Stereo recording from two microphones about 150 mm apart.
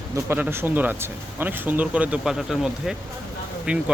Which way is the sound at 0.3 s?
15° right (ahead or behind).